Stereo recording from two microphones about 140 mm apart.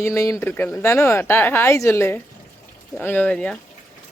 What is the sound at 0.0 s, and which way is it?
Speech, 20° left (ahead or behind).